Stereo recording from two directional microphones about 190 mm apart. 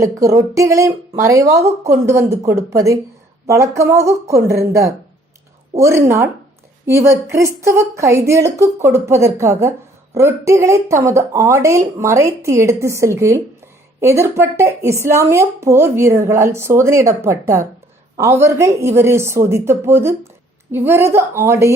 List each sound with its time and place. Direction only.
0.0 s speech: 15° right (ahead or behind)